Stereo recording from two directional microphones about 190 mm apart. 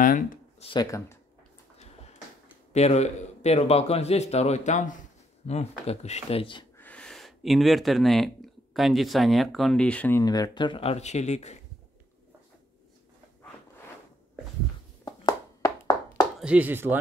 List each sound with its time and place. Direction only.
0.0 s speech: 45° left (ahead or behind)
0.6 s speech: 25° left (ahead or behind)
0.8 s speech: 15° left (ahead or behind)
2.7 s a man's voice: 35° left (ahead or behind)
6.8 s speech: 5° left (ahead or behind); by 11.6 s 35° left (ahead or behind)
15.0 s a sound: 15° left (ahead or behind)
16.3 s speech: 5° right (ahead or behind)